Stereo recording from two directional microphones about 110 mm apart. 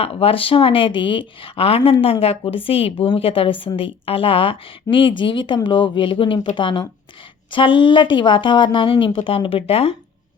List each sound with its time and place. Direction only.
0.0 s speech: 60° left (ahead or behind)